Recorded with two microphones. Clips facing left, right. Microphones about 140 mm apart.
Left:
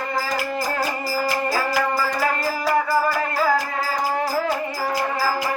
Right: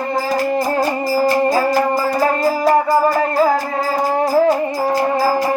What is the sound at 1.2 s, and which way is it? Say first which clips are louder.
Music: right 8 dB; 25° right (ahead or behind).